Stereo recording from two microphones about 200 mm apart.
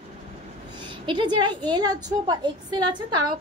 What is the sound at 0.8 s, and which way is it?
A woman's voice, 25° right (ahead or behind).